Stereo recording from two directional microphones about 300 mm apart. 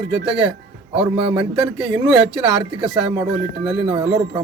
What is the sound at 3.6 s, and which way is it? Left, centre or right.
Speech, centre.